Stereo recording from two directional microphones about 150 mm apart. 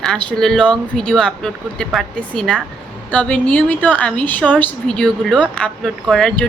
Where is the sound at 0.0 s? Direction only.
5° left (ahead or behind).